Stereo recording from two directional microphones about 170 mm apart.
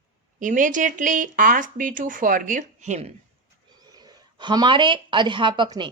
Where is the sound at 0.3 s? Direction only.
50° right (ahead or behind).